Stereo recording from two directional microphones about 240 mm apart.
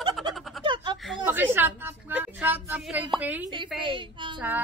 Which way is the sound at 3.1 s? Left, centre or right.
Centre.